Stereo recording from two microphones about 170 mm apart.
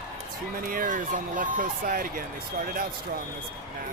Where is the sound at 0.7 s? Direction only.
50° right (ahead or behind).